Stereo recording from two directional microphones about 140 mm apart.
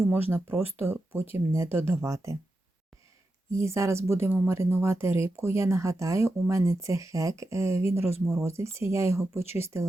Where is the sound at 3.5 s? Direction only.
20° right (ahead or behind).